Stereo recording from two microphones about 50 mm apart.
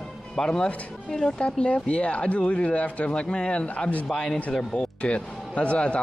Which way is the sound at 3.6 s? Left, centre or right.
Left.